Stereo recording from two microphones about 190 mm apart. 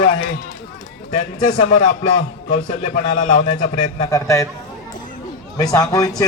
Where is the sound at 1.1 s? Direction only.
40° left (ahead or behind).